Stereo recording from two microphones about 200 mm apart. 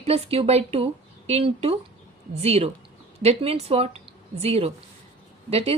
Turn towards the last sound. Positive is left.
turn(degrees=-30)  # may be behind; listen again after turning